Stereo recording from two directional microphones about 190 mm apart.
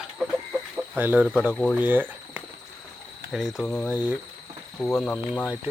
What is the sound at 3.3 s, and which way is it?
Speech, 5° left (ahead or behind).